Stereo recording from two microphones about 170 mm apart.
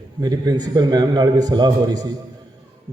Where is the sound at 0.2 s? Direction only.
25° right (ahead or behind).